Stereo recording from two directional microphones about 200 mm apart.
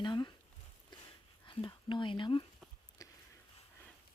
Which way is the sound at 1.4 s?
25° left (ahead or behind).